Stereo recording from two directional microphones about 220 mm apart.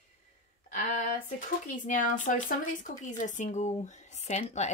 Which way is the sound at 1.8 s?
35° left (ahead or behind).